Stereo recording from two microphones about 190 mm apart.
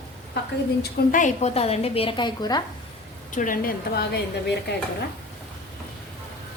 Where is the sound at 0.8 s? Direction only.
50° left (ahead or behind); by 2.6 s 20° left (ahead or behind).